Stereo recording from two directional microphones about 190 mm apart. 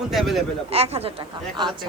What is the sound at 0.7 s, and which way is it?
Speech, 30° right (ahead or behind).